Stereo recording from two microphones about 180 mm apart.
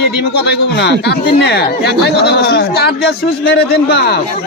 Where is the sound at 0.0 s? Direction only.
65° left (ahead or behind).